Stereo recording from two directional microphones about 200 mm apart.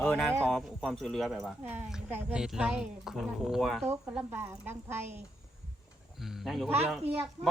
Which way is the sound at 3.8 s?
15° right (ahead or behind).